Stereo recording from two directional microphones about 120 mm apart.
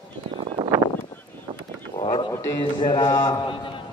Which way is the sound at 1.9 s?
35° left (ahead or behind).